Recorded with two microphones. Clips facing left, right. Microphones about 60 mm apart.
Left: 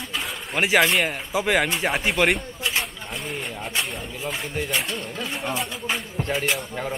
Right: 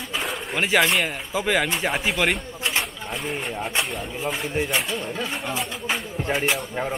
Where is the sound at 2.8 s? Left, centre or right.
Centre.